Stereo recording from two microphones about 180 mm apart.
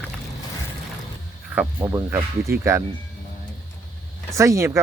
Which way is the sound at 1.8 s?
15° right (ahead or behind).